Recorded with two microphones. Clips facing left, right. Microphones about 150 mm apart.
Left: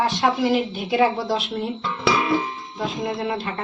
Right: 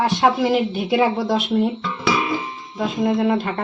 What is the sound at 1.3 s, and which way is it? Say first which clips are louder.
Speech: right 6 dB; 55° right (ahead or behind).